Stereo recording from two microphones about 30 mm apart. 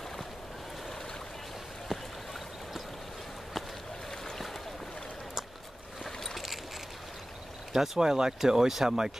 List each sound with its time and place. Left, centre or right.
1.9 s a sound: centre
6.0 s boat: centre
7.7 s speech: centre
8.0 s speech: centre